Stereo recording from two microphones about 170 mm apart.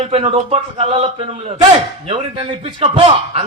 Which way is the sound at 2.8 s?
40° right (ahead or behind).